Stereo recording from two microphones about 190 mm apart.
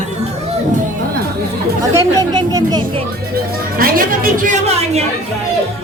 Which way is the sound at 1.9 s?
20° right (ahead or behind).